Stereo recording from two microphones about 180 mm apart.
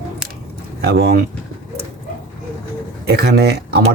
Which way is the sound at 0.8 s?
60° right (ahead or behind).